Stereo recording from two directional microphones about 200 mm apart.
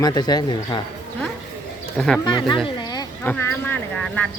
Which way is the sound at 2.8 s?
20° left (ahead or behind).